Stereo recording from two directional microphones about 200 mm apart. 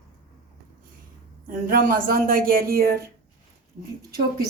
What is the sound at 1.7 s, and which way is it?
Speech, 45° right (ahead or behind).